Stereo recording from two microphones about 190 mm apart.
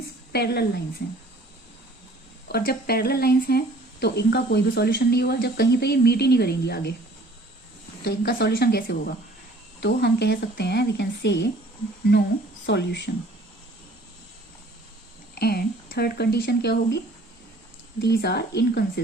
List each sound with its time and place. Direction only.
0.3 s speech: 60° left (ahead or behind)
2.5 s speech: 55° left (ahead or behind)
8.0 s speech: 55° left (ahead or behind)
12.6 s speech: 65° left (ahead or behind)
15.4 s speech: 55° left (ahead or behind)
18.0 s speech: 60° left (ahead or behind)